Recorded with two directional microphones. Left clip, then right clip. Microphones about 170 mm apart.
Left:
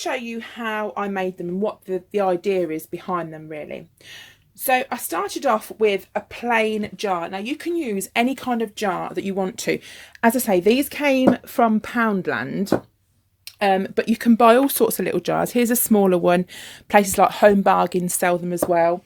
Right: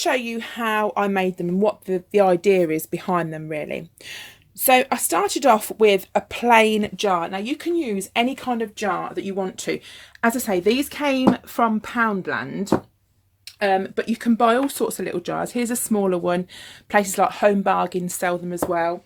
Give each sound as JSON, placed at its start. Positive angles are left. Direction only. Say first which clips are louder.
{"t": 0.0, "sound": "speech", "louder": "right 4 dB", "side_deg": -55}
{"t": 6.9, "sound": "speech", "louder": "right 3 dB", "side_deg": -20}
{"t": 7.8, "sound": "speech", "louder": "left 1 dB", "side_deg": 15}
{"t": 13.6, "sound": "speech", "louder": "left 1 dB", "side_deg": 45}